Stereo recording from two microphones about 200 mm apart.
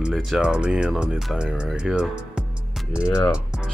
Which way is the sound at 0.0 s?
Centre (ahead or behind).